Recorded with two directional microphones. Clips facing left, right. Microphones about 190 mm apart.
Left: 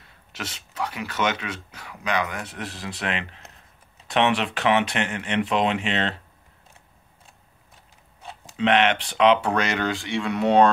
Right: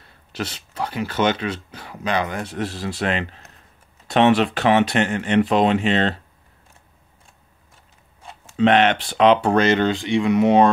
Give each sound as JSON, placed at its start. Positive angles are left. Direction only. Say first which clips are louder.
{"t": 0.3, "sound": "speech", "louder": "right 7 dB", "side_deg": -35}
{"t": 8.5, "sound": "speech", "louder": "right 4 dB", "side_deg": -40}